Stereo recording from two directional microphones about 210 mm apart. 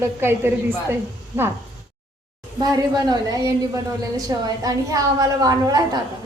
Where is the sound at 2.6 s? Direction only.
20° right (ahead or behind).